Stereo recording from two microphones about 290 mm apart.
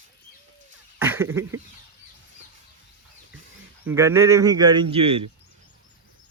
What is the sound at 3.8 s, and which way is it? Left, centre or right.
Speech, centre.